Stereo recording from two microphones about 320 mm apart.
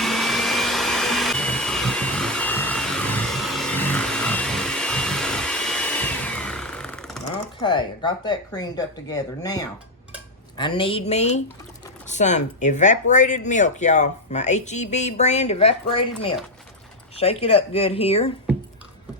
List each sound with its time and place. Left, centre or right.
0.0 s vacuum cleaner: centre
7.3 s speech: centre
17.2 s speech: centre